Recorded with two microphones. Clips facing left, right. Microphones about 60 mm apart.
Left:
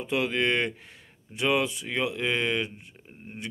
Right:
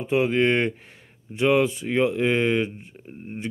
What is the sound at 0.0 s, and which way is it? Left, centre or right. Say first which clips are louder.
Speech: right 6 dB; right.